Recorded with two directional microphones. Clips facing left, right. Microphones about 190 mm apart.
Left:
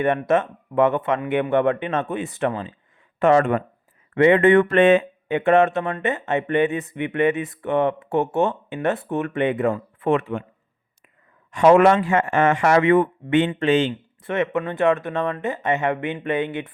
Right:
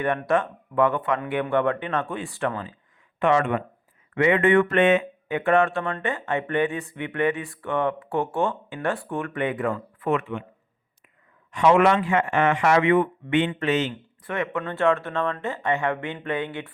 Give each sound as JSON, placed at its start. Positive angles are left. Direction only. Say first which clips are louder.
{"t": 0.0, "sound": "speech", "louder": "left 3 dB", "side_deg": 20}
{"t": 3.2, "sound": "speech", "louder": "left 4 dB", "side_deg": 45}
{"t": 11.5, "sound": "speech", "louder": "left 4 dB", "side_deg": 45}
{"t": 13.5, "sound": "speech", "louder": "left 5 dB", "side_deg": 30}